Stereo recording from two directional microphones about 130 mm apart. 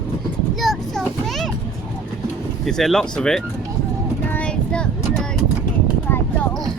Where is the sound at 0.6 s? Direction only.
Centre (ahead or behind).